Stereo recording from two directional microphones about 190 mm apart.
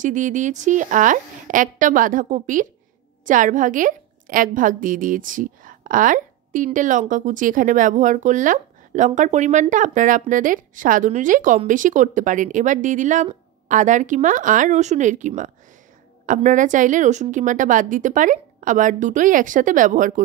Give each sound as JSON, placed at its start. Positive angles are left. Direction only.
{"t": 0.0, "sound": "a woman's voice", "side_deg": -40}